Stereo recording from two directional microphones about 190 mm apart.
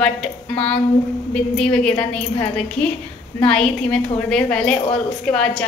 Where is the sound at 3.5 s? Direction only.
5° left (ahead or behind).